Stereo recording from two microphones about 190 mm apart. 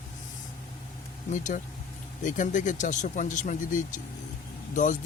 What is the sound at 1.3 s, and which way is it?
Speech, 40° left (ahead or behind).